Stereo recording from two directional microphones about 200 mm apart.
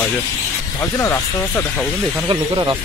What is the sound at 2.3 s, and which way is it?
Speech, 20° right (ahead or behind).